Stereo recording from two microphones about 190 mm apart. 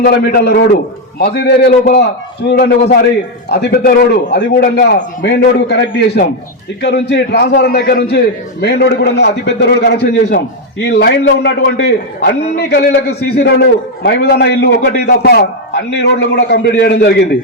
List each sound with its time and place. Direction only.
0.0 s a man's voice: 55° left (ahead or behind)